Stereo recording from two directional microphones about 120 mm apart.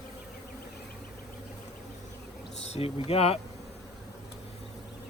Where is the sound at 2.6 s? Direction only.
60° left (ahead or behind).